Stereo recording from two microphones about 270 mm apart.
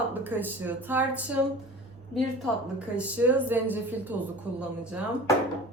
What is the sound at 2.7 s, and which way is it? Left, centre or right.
A woman's voice, centre.